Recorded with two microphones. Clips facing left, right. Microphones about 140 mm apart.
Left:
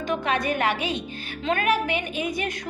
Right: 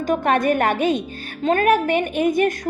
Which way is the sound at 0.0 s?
45° right (ahead or behind).